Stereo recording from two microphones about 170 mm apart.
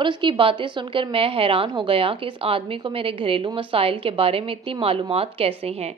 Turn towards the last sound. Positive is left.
turn(degrees=-35)  # may be behind; listen again after turning